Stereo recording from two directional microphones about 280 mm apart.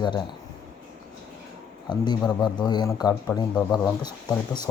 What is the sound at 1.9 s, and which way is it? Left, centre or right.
Speech, centre.